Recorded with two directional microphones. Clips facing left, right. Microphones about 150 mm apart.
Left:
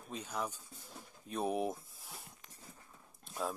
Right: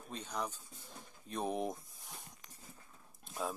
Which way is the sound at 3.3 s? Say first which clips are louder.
Left 1 dB; centre (ahead or behind).